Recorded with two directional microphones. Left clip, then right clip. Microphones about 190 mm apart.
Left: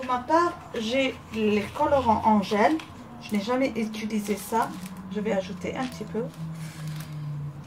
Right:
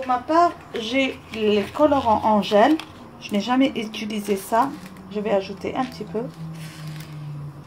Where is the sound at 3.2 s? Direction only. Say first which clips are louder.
Right 5 dB; 50° right (ahead or behind).